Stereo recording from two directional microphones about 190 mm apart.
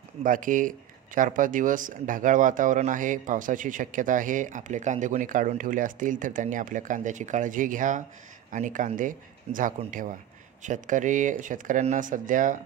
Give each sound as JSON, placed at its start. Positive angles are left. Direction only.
{"t": 0.2, "sound": "speech", "side_deg": -45}